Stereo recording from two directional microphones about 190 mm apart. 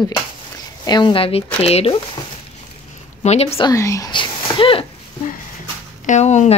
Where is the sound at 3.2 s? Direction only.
35° left (ahead or behind).